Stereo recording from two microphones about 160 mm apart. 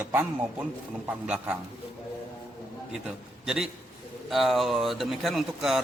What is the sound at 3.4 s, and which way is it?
A man's voice, 5° right (ahead or behind).